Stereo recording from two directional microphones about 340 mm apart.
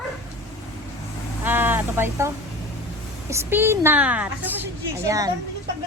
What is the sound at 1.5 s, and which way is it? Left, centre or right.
A woman's voice, centre.